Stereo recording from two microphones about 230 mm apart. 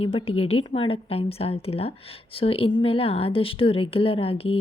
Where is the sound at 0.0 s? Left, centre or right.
Left.